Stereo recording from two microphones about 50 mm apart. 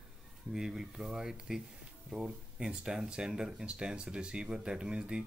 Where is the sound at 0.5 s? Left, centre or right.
Centre.